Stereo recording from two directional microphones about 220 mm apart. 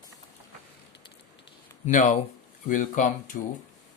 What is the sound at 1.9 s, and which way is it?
Speech, 35° left (ahead or behind).